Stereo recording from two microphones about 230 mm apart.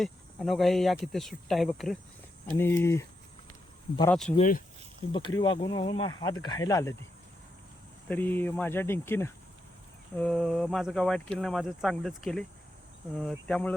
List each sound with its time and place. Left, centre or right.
0.0 s speech: centre
4.1 s speech: centre
4.4 s speech: left
5.1 s speech: centre
8.0 s speech: centre
13.5 s speech: centre